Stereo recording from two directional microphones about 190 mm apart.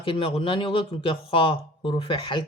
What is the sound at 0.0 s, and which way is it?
Speech, 30° left (ahead or behind).